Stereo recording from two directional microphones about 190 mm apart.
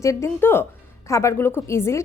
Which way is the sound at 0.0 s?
15° left (ahead or behind).